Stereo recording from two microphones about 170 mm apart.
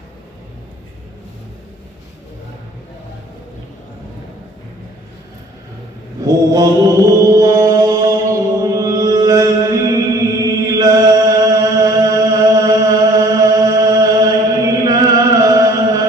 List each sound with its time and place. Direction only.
6.2 s mantra: 20° right (ahead or behind)
10.4 s chant: 20° right (ahead or behind)